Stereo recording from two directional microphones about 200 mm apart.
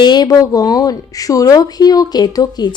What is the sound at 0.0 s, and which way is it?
Speech, 20° left (ahead or behind).